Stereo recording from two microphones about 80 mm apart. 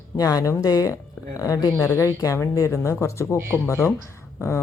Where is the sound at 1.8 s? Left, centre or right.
Left.